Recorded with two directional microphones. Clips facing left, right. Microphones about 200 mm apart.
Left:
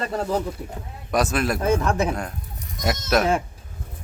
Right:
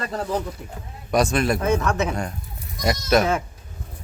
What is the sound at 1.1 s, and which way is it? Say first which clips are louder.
Speech: right 2 dB; 5° left (ahead or behind).